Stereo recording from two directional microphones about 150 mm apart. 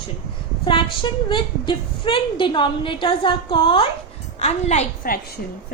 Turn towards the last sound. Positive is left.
turn(degrees=70)  # may be behind; listen again after turning